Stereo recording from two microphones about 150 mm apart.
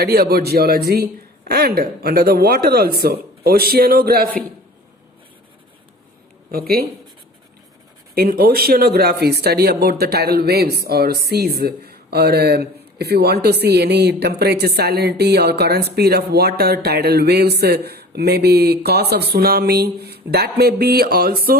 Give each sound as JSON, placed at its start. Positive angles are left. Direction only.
{"t": 0.0, "sound": "speech", "side_deg": -90}
{"t": 6.5, "sound": "speech", "side_deg": -90}
{"t": 8.1, "sound": "speech", "side_deg": -90}